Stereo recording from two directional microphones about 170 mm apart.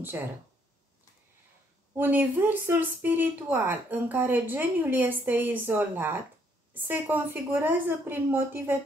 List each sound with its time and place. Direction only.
2.0 s speech: 10° right (ahead or behind)